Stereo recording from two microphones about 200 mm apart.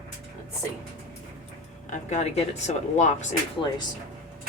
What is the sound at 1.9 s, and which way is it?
Speech, 35° left (ahead or behind).